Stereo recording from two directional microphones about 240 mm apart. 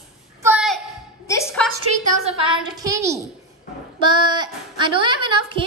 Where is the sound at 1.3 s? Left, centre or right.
Centre.